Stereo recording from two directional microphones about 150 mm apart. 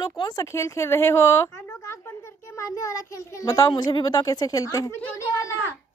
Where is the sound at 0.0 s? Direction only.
25° left (ahead or behind).